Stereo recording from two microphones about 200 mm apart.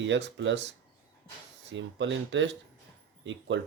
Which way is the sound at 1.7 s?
65° right (ahead or behind).